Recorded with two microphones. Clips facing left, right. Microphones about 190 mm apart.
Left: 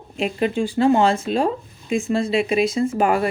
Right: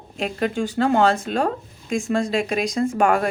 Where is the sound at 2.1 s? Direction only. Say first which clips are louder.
Left 1 dB; 45° right (ahead or behind).